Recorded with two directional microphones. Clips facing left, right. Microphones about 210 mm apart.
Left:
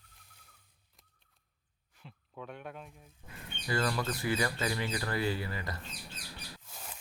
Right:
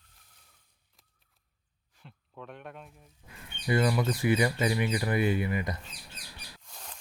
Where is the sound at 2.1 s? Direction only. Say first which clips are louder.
Even; centre (ahead or behind).